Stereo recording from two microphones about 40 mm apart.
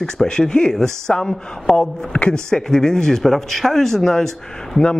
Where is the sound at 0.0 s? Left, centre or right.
Centre.